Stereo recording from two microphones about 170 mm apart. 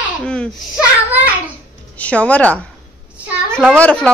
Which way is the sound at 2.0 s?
10° left (ahead or behind).